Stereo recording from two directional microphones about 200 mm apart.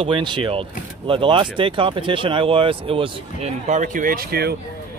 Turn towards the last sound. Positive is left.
turn(degrees=-50)  # may be behind; listen again after turning